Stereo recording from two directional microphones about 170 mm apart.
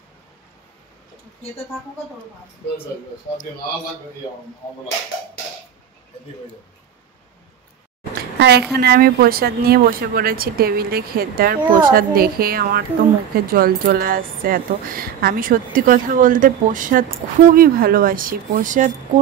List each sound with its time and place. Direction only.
8.4 s a woman's voice: 75° right (ahead or behind)
8.7 s speech: 65° right (ahead or behind); by 18.9 s 50° right (ahead or behind)